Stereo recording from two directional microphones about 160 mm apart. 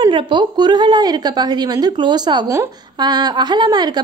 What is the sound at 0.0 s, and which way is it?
Speech, 30° right (ahead or behind).